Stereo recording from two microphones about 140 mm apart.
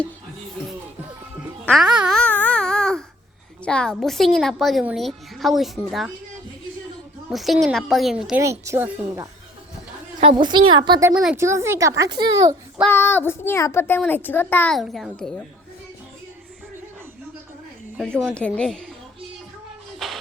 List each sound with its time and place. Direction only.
1.7 s a woman's voice: centre (ahead or behind)
2.2 s baby cry: 10° left (ahead or behind)
3.6 s a woman's voice: 5° left (ahead or behind)
7.3 s a woman's voice: centre (ahead or behind)
8.4 s speech: 20° right (ahead or behind)
10.2 s a woman's voice: 40° right (ahead or behind)
11.1 s a woman's voice: 5° right (ahead or behind)
11.3 s speech: 20° right (ahead or behind)
12.9 s child singing: 15° left (ahead or behind)
14.8 s a woman's voice: centre (ahead or behind)
17.9 s a woman's voice: centre (ahead or behind)